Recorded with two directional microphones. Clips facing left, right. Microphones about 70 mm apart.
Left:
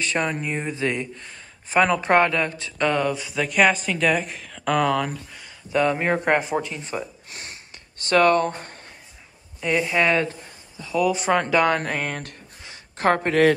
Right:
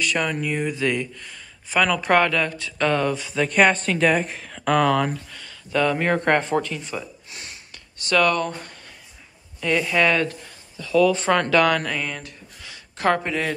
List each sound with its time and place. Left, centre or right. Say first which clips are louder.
0.0 s speech: right 1 dB; left
2.9 s speech: right 1 dB; centre
5.3 s speech: left 1 dB; centre
6.7 s a sound: even; left
9.6 s speech: right 1 dB; centre; by 12.4 s left
12.6 s a sound: left 1 dB; left